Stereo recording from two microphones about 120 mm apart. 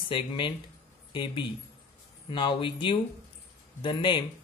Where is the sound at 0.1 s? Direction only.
45° left (ahead or behind).